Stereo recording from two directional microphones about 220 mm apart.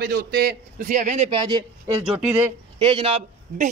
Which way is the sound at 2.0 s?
5° right (ahead or behind).